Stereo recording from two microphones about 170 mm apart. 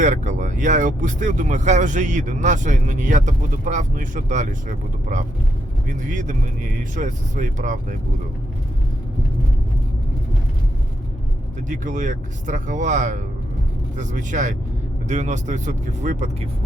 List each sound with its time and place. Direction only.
0.0 s speech: 45° right (ahead or behind)
11.7 s speech: 45° right (ahead or behind)